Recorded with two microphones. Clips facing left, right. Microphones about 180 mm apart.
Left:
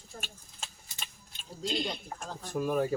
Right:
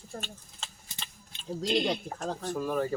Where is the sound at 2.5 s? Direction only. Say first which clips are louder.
Left 2 dB; 10° left (ahead or behind).